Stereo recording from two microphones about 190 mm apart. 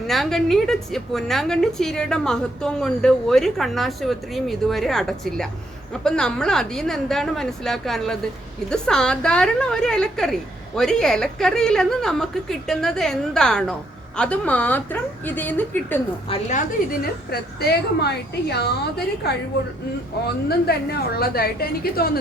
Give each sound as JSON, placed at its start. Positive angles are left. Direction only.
{"t": 0.1, "sound": "a woman's voice", "side_deg": 0}
{"t": 16.3, "sound": "a woman's voice", "side_deg": 40}
{"t": 17.6, "sound": "a woman's voice", "side_deg": 60}